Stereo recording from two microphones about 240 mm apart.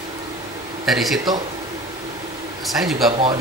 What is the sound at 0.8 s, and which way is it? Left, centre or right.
Speech, centre.